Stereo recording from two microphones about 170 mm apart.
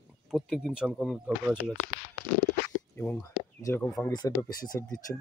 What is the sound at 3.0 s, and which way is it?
Speech, 15° left (ahead or behind).